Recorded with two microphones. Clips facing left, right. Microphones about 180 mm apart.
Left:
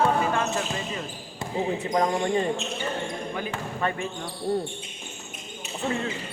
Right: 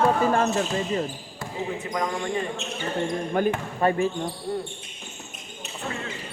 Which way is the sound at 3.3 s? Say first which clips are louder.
Right 7 dB; 50° right (ahead or behind).